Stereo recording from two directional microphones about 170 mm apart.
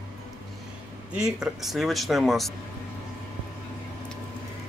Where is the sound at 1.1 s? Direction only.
5° right (ahead or behind).